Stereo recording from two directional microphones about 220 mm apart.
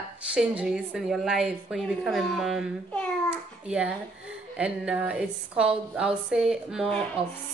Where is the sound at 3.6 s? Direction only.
5° right (ahead or behind).